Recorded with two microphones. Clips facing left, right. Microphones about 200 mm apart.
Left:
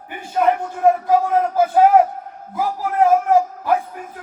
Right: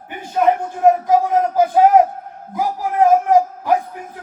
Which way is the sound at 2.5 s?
15° right (ahead or behind).